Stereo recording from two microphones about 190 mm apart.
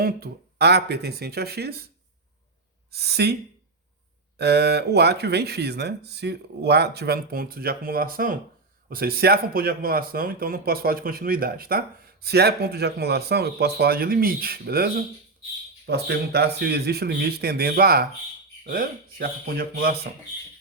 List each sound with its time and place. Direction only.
0.0 s speech: 55° right (ahead or behind)
2.9 s speech: 60° right (ahead or behind)
4.4 s speech: 60° right (ahead or behind)